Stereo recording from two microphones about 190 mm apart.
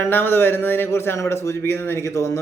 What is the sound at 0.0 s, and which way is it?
Speech, 10° left (ahead or behind).